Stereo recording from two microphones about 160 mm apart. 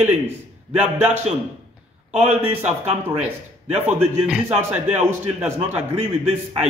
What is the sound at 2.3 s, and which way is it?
Speech, 10° right (ahead or behind).